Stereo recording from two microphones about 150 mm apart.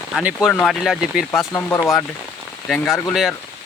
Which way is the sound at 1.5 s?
15° left (ahead or behind).